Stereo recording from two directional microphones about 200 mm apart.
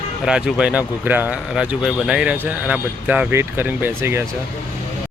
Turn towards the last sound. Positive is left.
turn(degrees=-10)  # may be behind; listen again after turning